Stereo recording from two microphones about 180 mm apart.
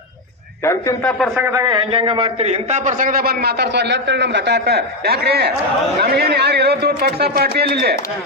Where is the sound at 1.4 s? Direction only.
15° right (ahead or behind).